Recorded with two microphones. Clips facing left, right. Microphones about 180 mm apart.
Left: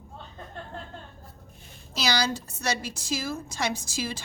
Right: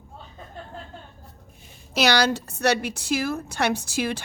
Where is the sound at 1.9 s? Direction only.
65° right (ahead or behind).